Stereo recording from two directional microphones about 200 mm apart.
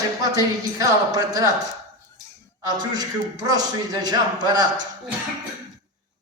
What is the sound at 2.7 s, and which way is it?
A woman's voice, 20° right (ahead or behind).